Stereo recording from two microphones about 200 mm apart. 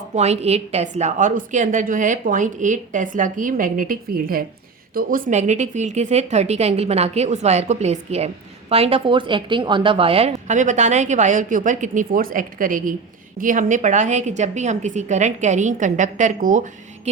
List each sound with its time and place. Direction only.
0.1 s a woman's voice: 35° right (ahead or behind)